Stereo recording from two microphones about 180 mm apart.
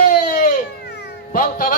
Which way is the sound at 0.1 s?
50° left (ahead or behind).